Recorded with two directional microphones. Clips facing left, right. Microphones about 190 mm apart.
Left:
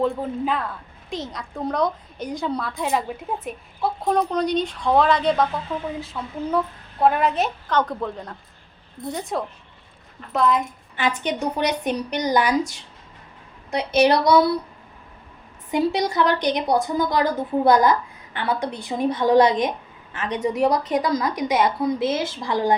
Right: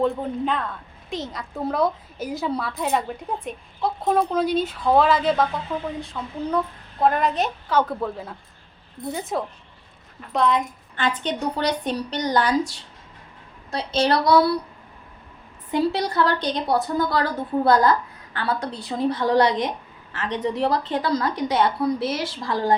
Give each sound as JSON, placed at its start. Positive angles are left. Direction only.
{"t": 0.0, "sound": "a woman's voice", "side_deg": 0}
{"t": 11.0, "sound": "a woman's voice", "side_deg": 15}
{"t": 13.7, "sound": "a woman's voice", "side_deg": 20}
{"t": 15.7, "sound": "a woman's voice", "side_deg": 20}